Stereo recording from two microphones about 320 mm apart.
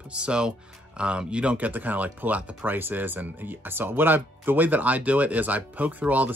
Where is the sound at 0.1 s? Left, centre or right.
Centre.